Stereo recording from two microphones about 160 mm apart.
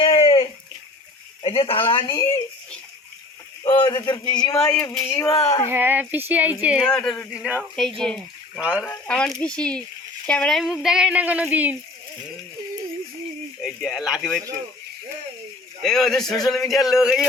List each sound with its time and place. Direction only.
0.0 s bathtub: 35° left (ahead or behind)
1.4 s speech: 35° left (ahead or behind)
3.8 s speech: 30° left (ahead or behind)
5.7 s speech: 10° right (ahead or behind)
6.8 s speech: 5° left (ahead or behind)
8.5 s speech: 10° right (ahead or behind)
8.8 s speech: 10° left (ahead or behind); by 11.8 s 10° right (ahead or behind)
13.6 s speech: centre (ahead or behind)
15.8 s speech: 5° left (ahead or behind)